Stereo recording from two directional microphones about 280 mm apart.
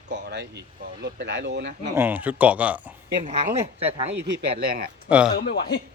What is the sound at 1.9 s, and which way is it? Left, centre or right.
Speech, centre.